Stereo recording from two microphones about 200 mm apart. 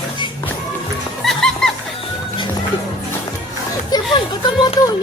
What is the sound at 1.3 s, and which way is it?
Music, 5° left (ahead or behind).